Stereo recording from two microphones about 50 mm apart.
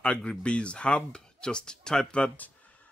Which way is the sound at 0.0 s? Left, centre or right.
Left.